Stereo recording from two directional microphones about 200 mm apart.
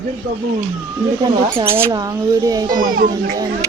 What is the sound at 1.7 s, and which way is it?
Speech, 15° right (ahead or behind).